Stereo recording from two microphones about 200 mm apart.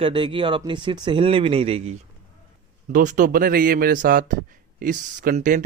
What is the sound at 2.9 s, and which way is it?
Speech, 40° right (ahead or behind).